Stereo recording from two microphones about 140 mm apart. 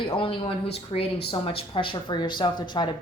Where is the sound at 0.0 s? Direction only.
40° left (ahead or behind).